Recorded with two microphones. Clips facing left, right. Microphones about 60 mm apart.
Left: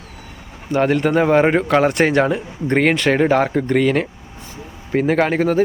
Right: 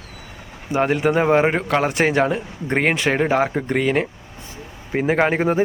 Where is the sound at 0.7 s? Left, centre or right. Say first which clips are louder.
Left 2 dB; centre.